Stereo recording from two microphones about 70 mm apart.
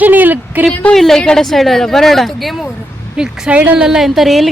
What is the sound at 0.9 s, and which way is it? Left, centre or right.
A woman's voice, centre.